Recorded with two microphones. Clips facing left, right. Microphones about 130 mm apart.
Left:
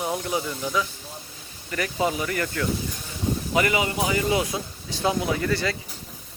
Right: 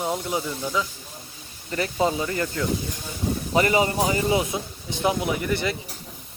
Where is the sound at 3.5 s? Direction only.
35° right (ahead or behind).